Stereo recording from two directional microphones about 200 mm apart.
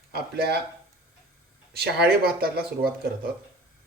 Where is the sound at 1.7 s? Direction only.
50° right (ahead or behind).